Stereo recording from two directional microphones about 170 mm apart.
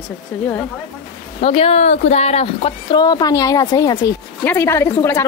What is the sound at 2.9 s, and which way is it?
A woman's voice, 25° left (ahead or behind).